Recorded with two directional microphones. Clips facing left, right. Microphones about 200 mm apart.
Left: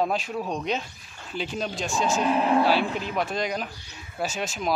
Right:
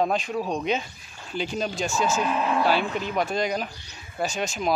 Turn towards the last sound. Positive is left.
turn(degrees=0)  # may be behind; listen again after turning